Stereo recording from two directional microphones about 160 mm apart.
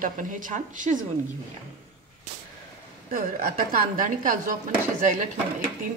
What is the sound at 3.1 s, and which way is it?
A woman's voice, 60° right (ahead or behind).